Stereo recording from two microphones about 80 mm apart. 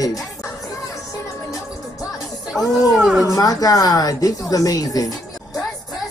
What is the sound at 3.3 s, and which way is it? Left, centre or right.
Speech, left.